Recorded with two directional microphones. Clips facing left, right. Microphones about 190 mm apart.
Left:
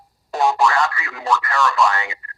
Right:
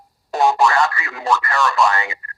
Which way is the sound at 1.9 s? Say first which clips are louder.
Right 2 dB; 45° right (ahead or behind).